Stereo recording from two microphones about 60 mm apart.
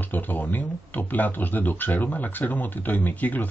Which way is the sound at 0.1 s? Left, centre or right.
Left.